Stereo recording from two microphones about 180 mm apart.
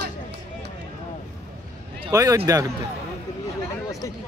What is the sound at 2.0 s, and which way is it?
Speech, 20° right (ahead or behind).